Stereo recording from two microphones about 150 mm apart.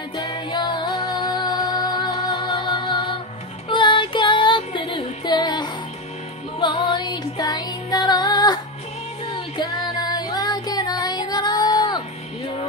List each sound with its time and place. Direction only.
0.2 s music: 30° left (ahead or behind)
9.9 s music: 25° left (ahead or behind)